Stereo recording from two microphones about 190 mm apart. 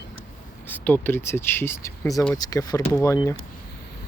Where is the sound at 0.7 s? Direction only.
10° left (ahead or behind).